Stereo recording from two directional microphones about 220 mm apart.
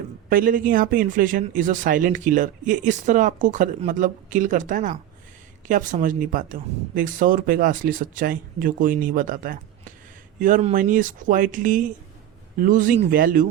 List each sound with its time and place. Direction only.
0.3 s speech: 40° right (ahead or behind)